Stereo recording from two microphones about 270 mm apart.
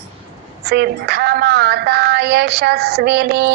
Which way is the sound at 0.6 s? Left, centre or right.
Right.